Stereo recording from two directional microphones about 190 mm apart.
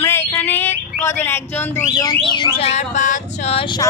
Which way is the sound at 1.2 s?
10° left (ahead or behind).